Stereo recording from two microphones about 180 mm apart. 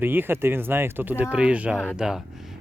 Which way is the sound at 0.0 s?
10° right (ahead or behind).